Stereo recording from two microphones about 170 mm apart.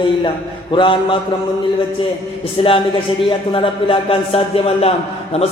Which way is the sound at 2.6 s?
35° left (ahead or behind).